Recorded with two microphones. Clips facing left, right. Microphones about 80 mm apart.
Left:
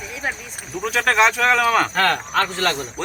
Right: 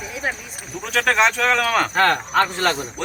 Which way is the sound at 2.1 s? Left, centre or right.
Centre.